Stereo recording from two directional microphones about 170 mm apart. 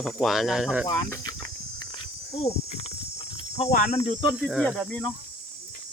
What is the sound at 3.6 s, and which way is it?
Speech, 40° left (ahead or behind).